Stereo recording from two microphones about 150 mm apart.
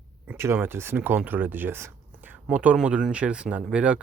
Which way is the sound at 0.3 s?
15° right (ahead or behind).